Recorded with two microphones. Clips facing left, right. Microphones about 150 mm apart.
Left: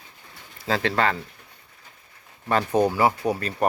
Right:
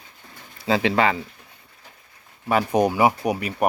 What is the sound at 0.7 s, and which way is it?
Speech, 5° right (ahead or behind).